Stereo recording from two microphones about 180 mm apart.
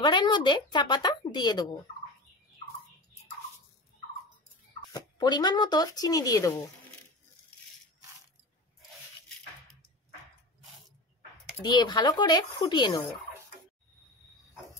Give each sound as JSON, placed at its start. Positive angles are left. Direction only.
{"t": 0.0, "sound": "speech", "side_deg": 25}
{"t": 4.9, "sound": "speech", "side_deg": 25}
{"t": 11.6, "sound": "speech", "side_deg": 25}